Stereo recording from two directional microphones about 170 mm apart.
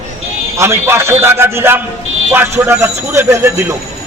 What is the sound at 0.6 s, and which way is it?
A man's voice, 15° right (ahead or behind).